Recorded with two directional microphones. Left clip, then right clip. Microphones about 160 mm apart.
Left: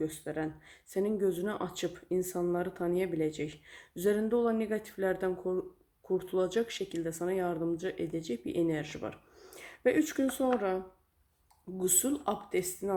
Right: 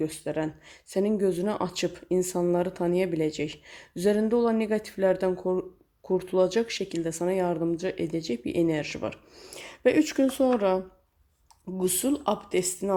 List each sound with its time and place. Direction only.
0.0 s speech: 35° right (ahead or behind)
11.8 s speech: 30° right (ahead or behind)